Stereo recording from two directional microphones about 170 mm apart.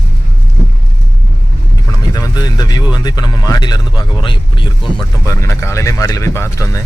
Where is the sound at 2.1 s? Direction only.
20° left (ahead or behind).